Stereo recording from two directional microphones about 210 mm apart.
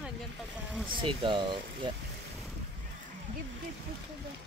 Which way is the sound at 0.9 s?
25° right (ahead or behind).